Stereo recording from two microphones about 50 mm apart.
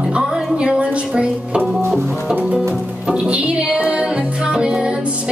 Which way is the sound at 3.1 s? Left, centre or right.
Right.